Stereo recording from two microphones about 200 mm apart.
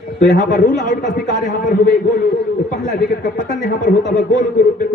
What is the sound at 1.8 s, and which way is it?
A man's voice, 45° left (ahead or behind).